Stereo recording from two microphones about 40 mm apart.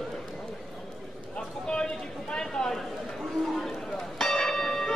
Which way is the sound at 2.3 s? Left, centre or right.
Centre.